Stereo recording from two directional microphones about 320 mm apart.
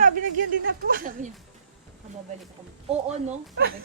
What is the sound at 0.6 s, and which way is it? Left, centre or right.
Speech, right.